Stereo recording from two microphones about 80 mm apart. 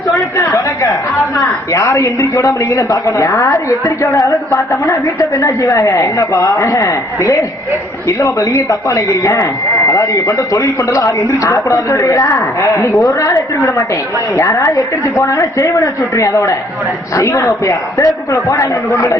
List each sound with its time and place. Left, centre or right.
0.1 s chatter: left
1.4 s a man's voice: left